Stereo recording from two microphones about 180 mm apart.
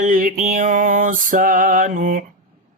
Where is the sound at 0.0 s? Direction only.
50° right (ahead or behind).